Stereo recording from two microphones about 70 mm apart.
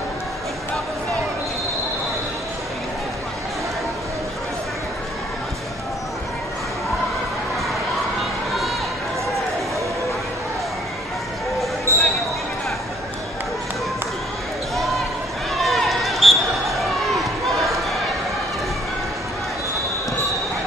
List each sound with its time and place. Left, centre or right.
11.9 s basketball bounce: right
15.5 s basketball bounce: centre
16.8 s a sound: centre